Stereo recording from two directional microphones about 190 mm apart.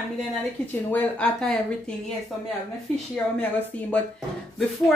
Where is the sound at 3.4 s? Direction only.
10° left (ahead or behind).